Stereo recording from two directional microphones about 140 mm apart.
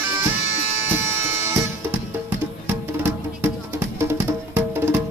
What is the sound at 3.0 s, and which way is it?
Music, 15° right (ahead or behind).